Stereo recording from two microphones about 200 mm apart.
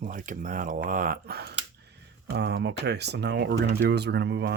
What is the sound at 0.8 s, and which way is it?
Speech, 45° right (ahead or behind).